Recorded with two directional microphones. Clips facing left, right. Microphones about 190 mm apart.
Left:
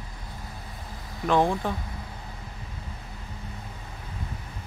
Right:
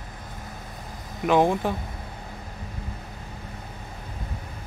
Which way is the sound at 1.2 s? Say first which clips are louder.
Right 3 dB; 20° right (ahead or behind).